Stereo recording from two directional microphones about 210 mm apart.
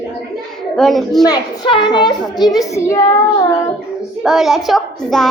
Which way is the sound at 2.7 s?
15° left (ahead or behind).